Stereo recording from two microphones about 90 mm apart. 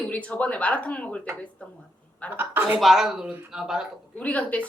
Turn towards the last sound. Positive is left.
turn(degrees=15)  # may be behind; listen again after turning